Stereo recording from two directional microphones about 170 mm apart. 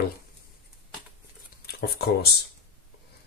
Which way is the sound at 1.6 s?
65° left (ahead or behind).